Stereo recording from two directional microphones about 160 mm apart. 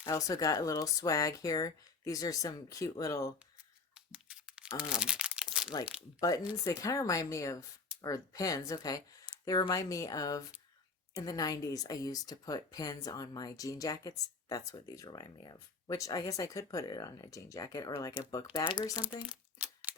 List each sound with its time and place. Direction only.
0.1 s speech: 20° left (ahead or behind)
3.9 s crumpling: 5° right (ahead or behind)
6.1 s speech: 20° left (ahead or behind)
19.2 s crumpling: 10° right (ahead or behind)